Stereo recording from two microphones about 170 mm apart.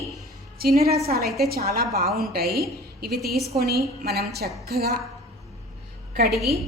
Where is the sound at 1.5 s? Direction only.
65° right (ahead or behind).